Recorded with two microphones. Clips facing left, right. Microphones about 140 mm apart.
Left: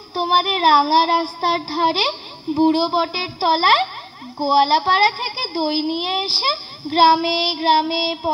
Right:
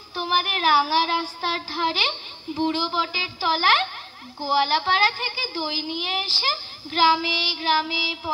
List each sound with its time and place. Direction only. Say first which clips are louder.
0.1 s a woman's voice: left 7 dB; 40° left (ahead or behind)